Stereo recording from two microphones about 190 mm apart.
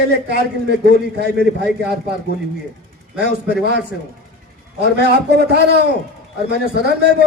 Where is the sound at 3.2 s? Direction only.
60° right (ahead or behind).